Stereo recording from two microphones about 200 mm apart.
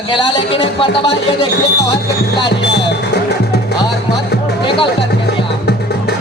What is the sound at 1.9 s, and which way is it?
Music, 60° left (ahead or behind).